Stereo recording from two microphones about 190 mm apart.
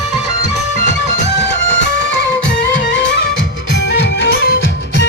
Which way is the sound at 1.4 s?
70° left (ahead or behind).